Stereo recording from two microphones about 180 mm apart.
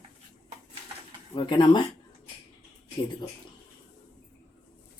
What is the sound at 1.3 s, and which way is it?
Speech, 25° left (ahead or behind).